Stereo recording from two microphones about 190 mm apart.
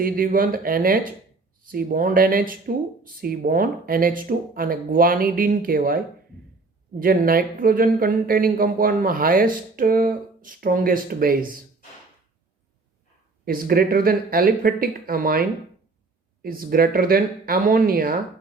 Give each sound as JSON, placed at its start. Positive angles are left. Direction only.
{"t": 0.0, "sound": "speech", "side_deg": -50}
{"t": 7.0, "sound": "speech", "side_deg": -50}
{"t": 13.4, "sound": "speech", "side_deg": -50}